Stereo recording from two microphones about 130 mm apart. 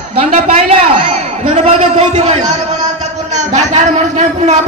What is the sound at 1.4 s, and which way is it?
A man's voice, 50° right (ahead or behind).